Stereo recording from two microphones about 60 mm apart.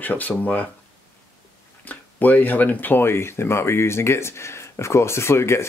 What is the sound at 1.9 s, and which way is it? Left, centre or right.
Speech, left.